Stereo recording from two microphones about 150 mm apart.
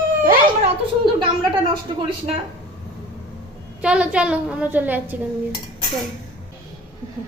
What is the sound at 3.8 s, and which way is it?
A woman's voice, 5° right (ahead or behind).